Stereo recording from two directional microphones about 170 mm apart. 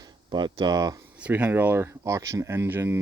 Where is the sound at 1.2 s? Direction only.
10° right (ahead or behind).